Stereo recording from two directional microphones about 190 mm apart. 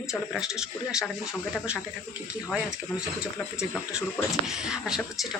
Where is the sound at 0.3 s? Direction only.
5° right (ahead or behind).